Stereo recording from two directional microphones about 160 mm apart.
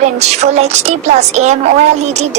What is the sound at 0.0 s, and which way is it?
A woman's voice, 45° right (ahead or behind).